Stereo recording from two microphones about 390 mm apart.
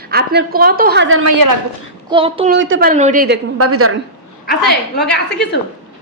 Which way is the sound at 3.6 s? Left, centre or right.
Right.